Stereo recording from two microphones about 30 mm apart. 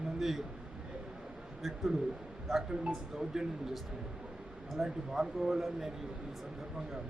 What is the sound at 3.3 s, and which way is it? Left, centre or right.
Speech, centre.